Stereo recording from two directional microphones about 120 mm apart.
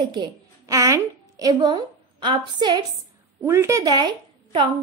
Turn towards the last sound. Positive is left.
turn(degrees=-40)  # may be behind; listen again after turning